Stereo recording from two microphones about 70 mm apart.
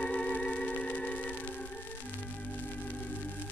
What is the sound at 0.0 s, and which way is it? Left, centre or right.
Music, centre.